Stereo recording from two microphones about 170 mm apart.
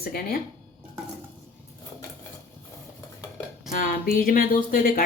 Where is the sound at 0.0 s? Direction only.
60° left (ahead or behind).